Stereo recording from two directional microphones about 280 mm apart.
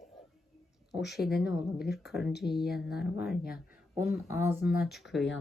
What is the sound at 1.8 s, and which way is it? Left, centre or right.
Speech, left.